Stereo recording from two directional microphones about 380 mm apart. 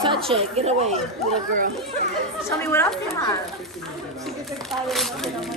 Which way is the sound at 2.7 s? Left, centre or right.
Centre.